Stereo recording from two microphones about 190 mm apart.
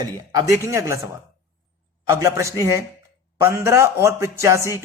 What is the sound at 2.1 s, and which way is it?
A man's voice, 15° right (ahead or behind).